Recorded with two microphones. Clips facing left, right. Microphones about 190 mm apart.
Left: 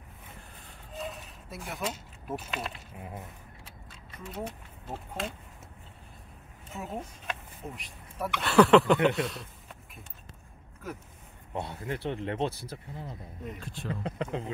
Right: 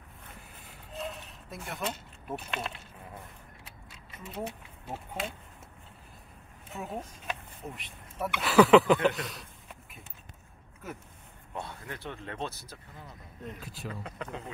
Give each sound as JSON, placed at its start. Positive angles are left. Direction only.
{"t": 0.9, "sound": "a sound", "side_deg": 0}
{"t": 3.9, "sound": "speech", "side_deg": -5}
{"t": 6.7, "sound": "speech", "side_deg": 0}
{"t": 9.2, "sound": "a sound", "side_deg": 0}
{"t": 11.5, "sound": "speech", "side_deg": 25}
{"t": 13.6, "sound": "speech", "side_deg": -5}
{"t": 14.0, "sound": "speech", "side_deg": 30}